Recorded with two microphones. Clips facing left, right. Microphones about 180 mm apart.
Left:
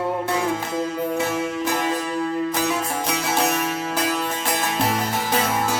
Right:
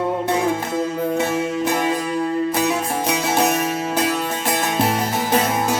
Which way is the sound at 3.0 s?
20° right (ahead or behind).